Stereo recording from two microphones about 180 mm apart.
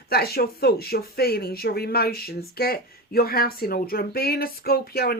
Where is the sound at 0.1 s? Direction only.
60° left (ahead or behind).